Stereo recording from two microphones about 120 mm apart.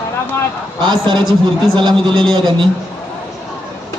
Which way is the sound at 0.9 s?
40° right (ahead or behind).